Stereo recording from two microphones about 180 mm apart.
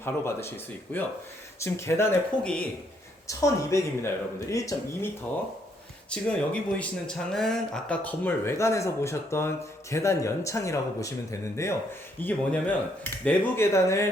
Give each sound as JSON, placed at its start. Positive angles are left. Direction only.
{"t": 0.0, "sound": "speech", "side_deg": 15}
{"t": 3.2, "sound": "speech", "side_deg": 15}
{"t": 6.1, "sound": "speech", "side_deg": 5}